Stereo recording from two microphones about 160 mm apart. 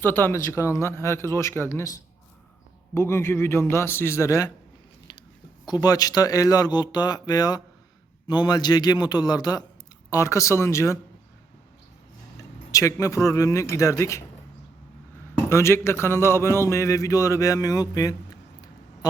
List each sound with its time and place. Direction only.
0.0 s a man's voice: 15° left (ahead or behind)
5.6 s speech: 25° left (ahead or behind)
12.4 s speech: 20° left (ahead or behind)
15.4 s a man's voice: 15° left (ahead or behind)